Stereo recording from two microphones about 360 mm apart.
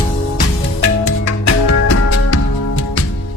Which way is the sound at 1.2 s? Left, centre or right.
Left.